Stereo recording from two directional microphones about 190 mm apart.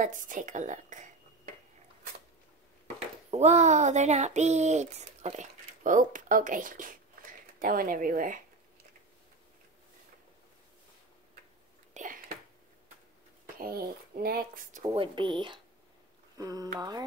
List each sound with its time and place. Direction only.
0.0 s speech: 45° right (ahead or behind)
3.3 s speech: 35° right (ahead or behind)
11.9 s a sound: 40° right (ahead or behind)
13.6 s speech: 50° right (ahead or behind)
14.9 s speech: 25° right (ahead or behind)